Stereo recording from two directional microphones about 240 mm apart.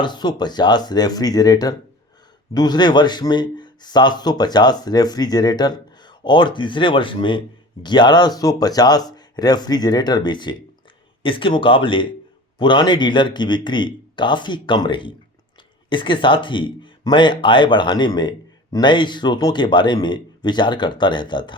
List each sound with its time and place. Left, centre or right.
0.0 s a man's voice: centre